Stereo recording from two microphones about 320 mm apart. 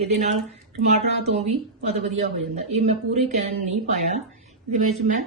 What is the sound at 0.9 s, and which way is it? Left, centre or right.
Speech, centre.